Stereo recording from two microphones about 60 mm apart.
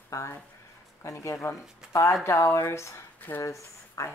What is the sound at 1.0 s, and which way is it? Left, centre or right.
Speech, left.